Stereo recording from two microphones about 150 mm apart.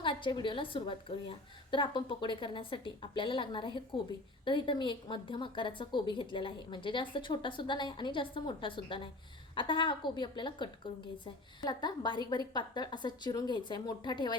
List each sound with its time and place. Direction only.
0.0 s a woman's voice: 35° left (ahead or behind)